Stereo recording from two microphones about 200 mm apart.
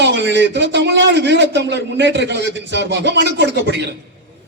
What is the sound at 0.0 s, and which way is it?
A man's voice, 60° right (ahead or behind).